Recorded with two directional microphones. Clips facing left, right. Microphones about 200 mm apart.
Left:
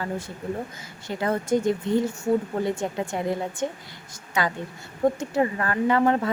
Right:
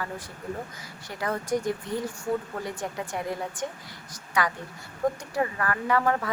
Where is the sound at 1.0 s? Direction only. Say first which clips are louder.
Left 5 dB; 25° left (ahead or behind).